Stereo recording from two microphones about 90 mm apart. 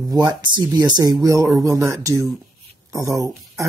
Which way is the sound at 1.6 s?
35° right (ahead or behind).